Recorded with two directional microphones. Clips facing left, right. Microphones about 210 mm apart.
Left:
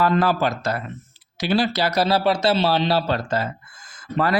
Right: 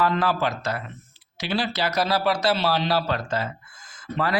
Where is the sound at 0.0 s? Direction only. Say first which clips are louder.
Left 4 dB; 40° left (ahead or behind).